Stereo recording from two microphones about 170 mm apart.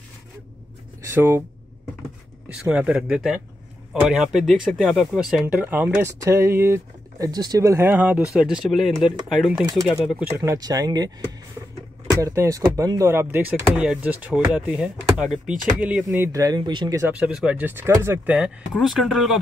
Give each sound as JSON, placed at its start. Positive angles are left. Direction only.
{"t": 1.0, "sound": "speech", "side_deg": -15}
{"t": 2.5, "sound": "speech", "side_deg": -5}
{"t": 10.3, "sound": "speech", "side_deg": -15}
{"t": 17.0, "sound": "speech", "side_deg": -10}